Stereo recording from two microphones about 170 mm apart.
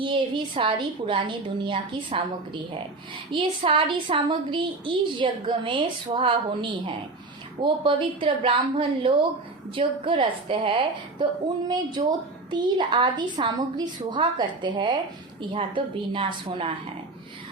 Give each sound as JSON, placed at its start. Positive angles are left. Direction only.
{"t": 0.0, "sound": "a woman's voice", "side_deg": -30}
{"t": 3.3, "sound": "a woman's voice", "side_deg": -30}